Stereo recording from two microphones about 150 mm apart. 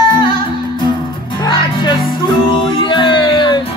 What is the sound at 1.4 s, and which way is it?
Music, 30° left (ahead or behind).